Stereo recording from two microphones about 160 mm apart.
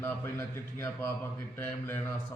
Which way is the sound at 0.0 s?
15° left (ahead or behind).